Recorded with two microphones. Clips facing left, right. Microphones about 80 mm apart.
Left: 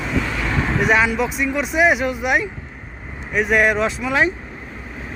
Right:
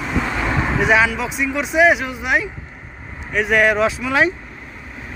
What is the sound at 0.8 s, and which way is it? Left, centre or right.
Speech, centre.